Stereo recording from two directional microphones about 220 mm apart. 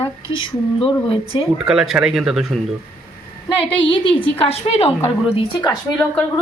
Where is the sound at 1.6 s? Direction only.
Centre (ahead or behind).